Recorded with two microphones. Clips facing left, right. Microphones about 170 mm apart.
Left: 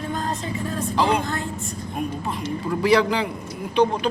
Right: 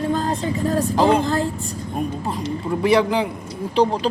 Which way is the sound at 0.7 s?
40° right (ahead or behind).